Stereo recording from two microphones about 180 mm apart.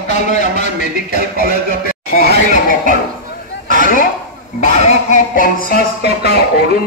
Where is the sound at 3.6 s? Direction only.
50° left (ahead or behind).